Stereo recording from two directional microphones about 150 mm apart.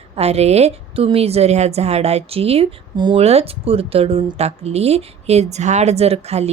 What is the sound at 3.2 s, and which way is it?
Speech, 45° right (ahead or behind).